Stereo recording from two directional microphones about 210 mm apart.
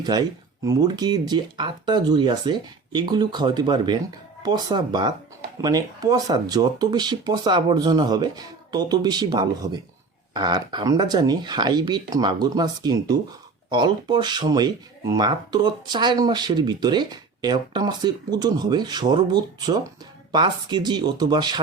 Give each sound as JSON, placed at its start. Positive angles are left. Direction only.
{"t": 0.0, "sound": "speech", "side_deg": -20}